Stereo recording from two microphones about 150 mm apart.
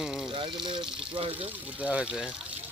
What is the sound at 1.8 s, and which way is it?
Speech, 10° right (ahead or behind).